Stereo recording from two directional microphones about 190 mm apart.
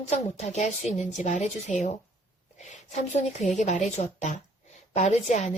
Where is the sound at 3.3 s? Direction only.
40° left (ahead or behind).